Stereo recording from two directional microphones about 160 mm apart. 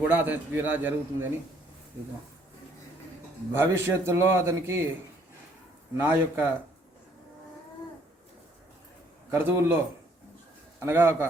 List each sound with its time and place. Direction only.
0.1 s a man's voice: 10° right (ahead or behind)
3.5 s a man's voice: 15° right (ahead or behind)
6.0 s a man's voice: 10° right (ahead or behind)
9.3 s a man's voice: 10° right (ahead or behind)